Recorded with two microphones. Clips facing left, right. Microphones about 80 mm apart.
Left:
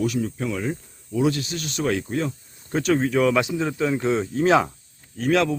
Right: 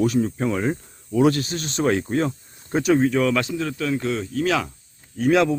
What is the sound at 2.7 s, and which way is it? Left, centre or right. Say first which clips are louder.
Speech: right 2 dB; centre.